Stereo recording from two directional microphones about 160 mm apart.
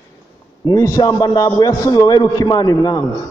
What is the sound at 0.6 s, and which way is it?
A man's voice, 20° left (ahead or behind).